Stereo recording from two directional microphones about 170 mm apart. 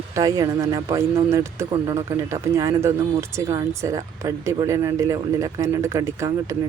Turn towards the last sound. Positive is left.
turn(degrees=-20)  # may be behind; listen again after turning